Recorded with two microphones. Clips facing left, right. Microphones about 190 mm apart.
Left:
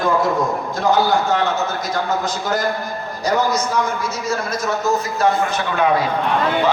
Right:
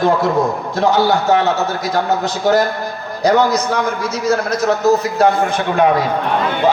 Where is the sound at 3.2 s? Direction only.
65° right (ahead or behind).